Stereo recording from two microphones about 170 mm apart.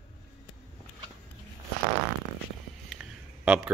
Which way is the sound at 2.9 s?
5° right (ahead or behind).